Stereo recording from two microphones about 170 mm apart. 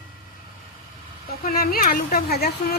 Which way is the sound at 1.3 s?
60° left (ahead or behind).